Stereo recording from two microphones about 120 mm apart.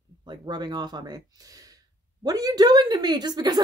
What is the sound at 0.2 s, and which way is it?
Speech, 35° right (ahead or behind).